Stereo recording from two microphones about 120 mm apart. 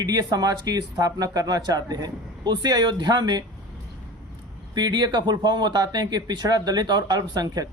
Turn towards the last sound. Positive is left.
turn(degrees=-30)  # may be behind; listen again after turning